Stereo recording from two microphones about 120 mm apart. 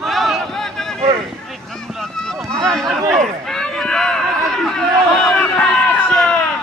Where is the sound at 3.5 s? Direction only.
5° left (ahead or behind).